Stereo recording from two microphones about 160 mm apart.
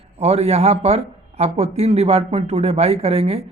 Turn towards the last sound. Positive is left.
turn(degrees=-40)  # may be behind; listen again after turning